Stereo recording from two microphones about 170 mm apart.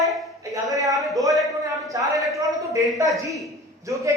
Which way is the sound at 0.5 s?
20° right (ahead or behind).